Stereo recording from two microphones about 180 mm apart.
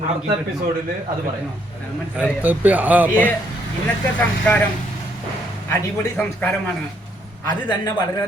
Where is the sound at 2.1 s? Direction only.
5° right (ahead or behind).